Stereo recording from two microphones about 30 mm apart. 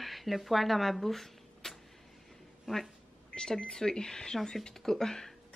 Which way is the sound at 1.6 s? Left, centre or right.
Centre.